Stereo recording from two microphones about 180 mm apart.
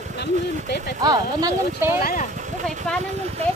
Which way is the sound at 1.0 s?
20° right (ahead or behind).